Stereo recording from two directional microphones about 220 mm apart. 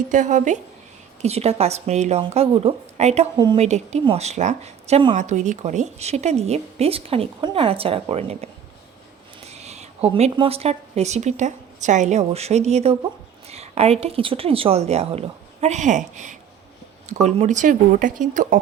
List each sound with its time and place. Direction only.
0.1 s a woman's voice: 35° right (ahead or behind)
9.5 s a woman's voice: 30° right (ahead or behind)